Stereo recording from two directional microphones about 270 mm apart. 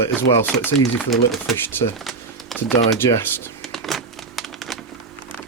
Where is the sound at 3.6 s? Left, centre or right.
Centre.